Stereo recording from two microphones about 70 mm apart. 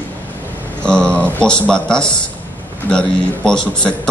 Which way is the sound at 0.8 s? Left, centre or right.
Centre.